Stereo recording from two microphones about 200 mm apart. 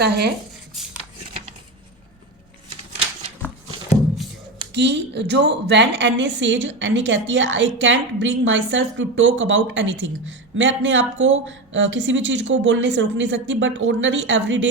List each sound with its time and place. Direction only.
0.0 s speech: 55° right (ahead or behind)
0.8 s a sound: centre (ahead or behind)
4.7 s a woman's voice: 60° right (ahead or behind)